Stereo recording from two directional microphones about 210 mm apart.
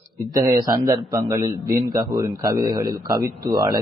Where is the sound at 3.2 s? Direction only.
45° right (ahead or behind).